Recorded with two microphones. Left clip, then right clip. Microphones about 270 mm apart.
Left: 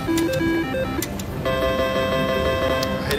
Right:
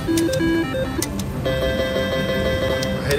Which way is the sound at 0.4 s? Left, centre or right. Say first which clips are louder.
Right 2 dB; left.